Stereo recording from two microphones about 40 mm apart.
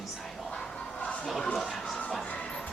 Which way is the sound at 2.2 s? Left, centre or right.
Left.